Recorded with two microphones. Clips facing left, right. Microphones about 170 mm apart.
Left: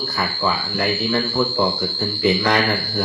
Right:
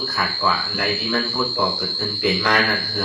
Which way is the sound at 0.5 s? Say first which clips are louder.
Left 2 dB; 15° left (ahead or behind).